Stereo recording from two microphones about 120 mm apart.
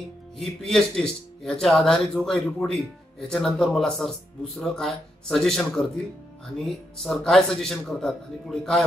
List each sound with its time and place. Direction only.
0.4 s speech: 5° left (ahead or behind)
2.6 s speech: centre (ahead or behind)